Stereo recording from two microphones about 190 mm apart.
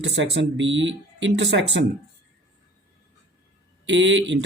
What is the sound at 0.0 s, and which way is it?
Speech, 70° right (ahead or behind).